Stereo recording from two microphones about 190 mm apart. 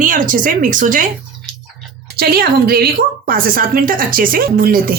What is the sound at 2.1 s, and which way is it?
A woman's voice, 55° right (ahead or behind).